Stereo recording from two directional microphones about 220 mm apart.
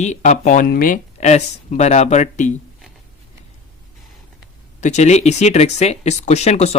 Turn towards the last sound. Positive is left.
turn(degrees=30)  # may be behind; listen again after turning